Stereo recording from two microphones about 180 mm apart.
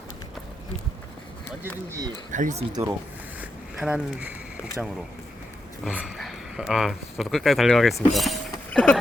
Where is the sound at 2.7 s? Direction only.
15° right (ahead or behind).